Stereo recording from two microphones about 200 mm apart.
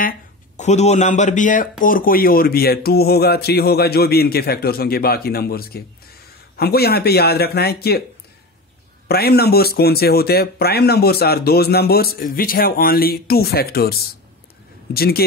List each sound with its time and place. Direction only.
0.6 s speech: 35° left (ahead or behind); by 8.0 s 50° left (ahead or behind)
9.0 s speech: 50° left (ahead or behind)
15.0 s speech: 50° left (ahead or behind)